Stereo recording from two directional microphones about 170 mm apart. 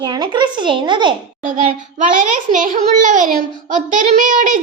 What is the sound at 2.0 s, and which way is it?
A child's voice, 50° right (ahead or behind).